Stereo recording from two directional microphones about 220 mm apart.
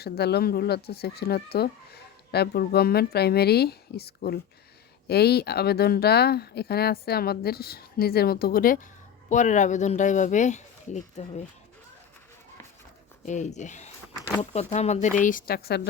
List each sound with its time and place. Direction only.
0.0 s speech: 45° left (ahead or behind)
13.2 s speech: 30° left (ahead or behind)